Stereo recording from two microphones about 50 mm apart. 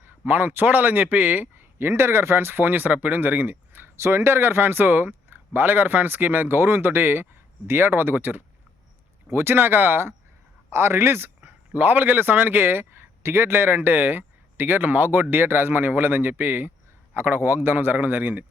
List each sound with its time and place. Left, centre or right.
0.0 s speech: right
1.9 s speech: right
3.2 s a sound: right
3.9 s speech: right
10.7 s a man's voice: right
11.4 s speech: right